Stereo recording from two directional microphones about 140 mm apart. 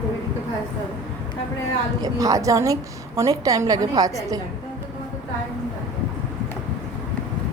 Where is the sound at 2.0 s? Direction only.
25° right (ahead or behind).